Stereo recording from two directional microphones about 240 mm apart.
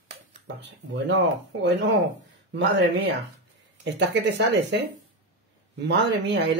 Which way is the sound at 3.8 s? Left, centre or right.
Right.